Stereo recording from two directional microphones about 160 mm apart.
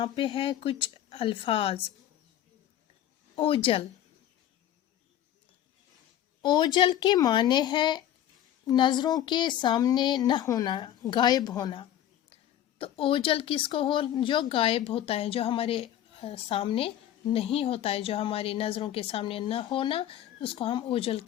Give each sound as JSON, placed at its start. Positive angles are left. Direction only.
{"t": 0.0, "sound": "speech", "side_deg": 30}
{"t": 3.3, "sound": "speech", "side_deg": 35}
{"t": 6.4, "sound": "a woman's voice", "side_deg": 30}